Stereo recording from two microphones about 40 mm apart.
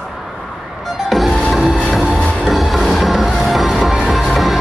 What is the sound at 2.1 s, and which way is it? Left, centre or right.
Music, left.